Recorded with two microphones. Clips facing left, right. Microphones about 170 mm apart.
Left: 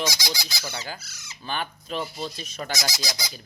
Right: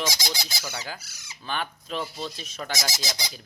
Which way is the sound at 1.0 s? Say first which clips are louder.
Left 1 dB; 15° right (ahead or behind).